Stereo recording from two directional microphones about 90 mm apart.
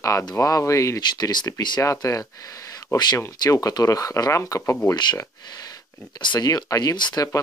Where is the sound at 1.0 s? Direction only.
55° left (ahead or behind).